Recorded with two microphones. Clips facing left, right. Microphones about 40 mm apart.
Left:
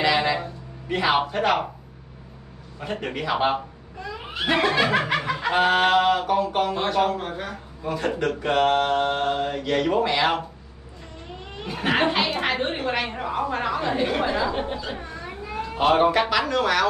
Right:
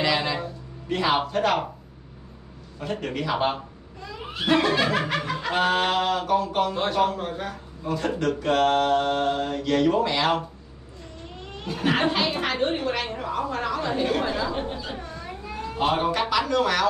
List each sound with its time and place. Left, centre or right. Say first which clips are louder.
0.0 s music: left 3 dB; centre
2.8 s speech: even; centre
11.5 s laughter: left 1 dB; centre
12.4 s speech: even; centre